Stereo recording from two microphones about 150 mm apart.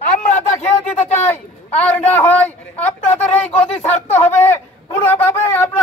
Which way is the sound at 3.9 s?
50° left (ahead or behind).